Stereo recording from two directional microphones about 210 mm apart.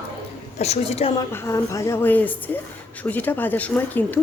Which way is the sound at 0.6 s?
30° left (ahead or behind).